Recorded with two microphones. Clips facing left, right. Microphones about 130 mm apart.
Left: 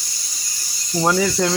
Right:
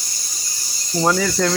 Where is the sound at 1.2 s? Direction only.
15° left (ahead or behind).